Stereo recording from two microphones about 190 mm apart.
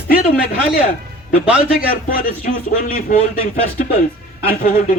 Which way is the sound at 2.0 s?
50° left (ahead or behind).